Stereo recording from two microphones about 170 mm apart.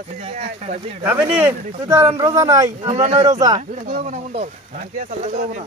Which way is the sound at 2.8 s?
35° right (ahead or behind).